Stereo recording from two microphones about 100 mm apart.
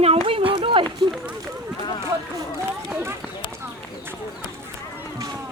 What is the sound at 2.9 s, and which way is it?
Speech, 20° right (ahead or behind).